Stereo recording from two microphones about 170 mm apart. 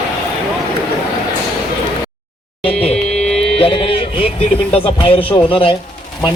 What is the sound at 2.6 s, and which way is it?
Music, 35° left (ahead or behind).